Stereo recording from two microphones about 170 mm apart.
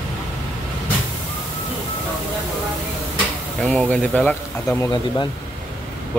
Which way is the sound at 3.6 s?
5° left (ahead or behind).